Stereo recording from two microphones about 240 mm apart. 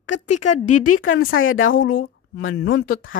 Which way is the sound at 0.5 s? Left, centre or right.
Left.